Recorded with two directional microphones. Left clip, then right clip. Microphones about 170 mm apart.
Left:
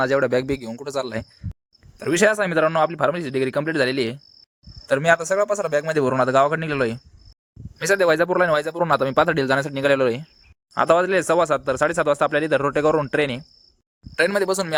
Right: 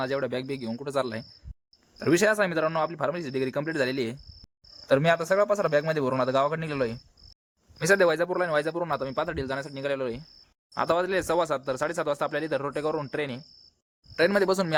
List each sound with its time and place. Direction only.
0.0 s a man's voice: 40° left (ahead or behind)
2.0 s a man's voice: 30° left (ahead or behind); by 10.2 s 50° left (ahead or behind)
10.8 s speech: 30° left (ahead or behind)